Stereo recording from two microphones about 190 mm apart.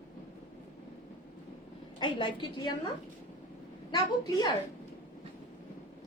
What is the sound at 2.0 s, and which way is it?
Speech, 25° left (ahead or behind).